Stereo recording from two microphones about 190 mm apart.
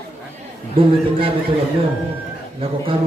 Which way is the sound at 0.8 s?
30° right (ahead or behind).